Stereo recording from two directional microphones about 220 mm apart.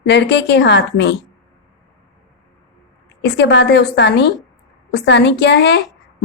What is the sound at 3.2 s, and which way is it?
A woman's voice, 55° left (ahead or behind).